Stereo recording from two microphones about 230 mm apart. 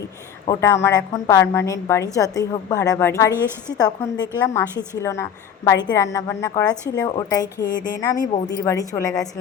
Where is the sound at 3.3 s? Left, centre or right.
Centre.